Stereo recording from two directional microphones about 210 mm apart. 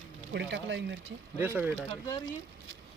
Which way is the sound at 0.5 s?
55° right (ahead or behind).